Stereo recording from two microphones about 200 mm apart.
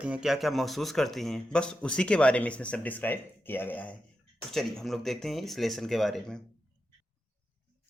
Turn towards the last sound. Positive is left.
turn(degrees=0)  # may be behind; listen again after turning